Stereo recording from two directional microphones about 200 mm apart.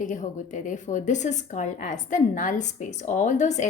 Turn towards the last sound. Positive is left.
turn(degrees=35)  # may be behind; listen again after turning